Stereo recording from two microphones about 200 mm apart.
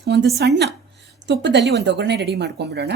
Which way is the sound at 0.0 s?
60° right (ahead or behind).